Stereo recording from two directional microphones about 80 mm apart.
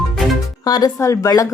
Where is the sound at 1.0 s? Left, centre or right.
Left.